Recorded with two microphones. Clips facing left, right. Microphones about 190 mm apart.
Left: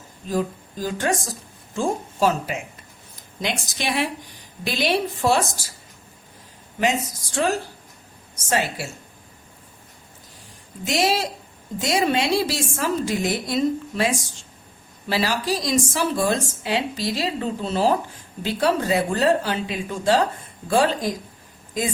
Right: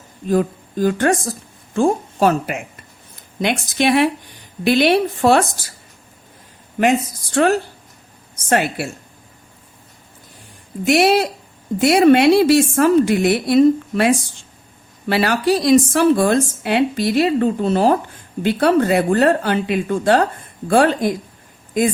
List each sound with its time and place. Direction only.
0.3 s speech: 55° right (ahead or behind)
7.3 s speech: 60° right (ahead or behind)
10.8 s speech: 60° right (ahead or behind)